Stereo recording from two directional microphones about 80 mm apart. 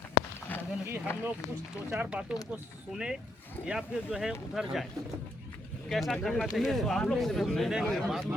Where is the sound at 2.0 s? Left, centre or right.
Centre.